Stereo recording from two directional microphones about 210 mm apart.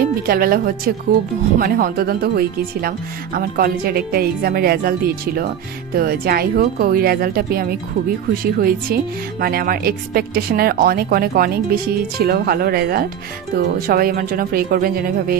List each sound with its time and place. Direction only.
0.0 s speech: 45° right (ahead or behind)